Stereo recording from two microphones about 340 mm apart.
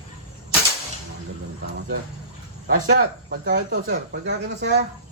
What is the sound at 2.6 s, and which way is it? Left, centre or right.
Speech, right.